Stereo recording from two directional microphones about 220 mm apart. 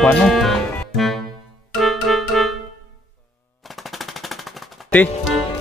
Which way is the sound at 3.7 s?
Centre (ahead or behind).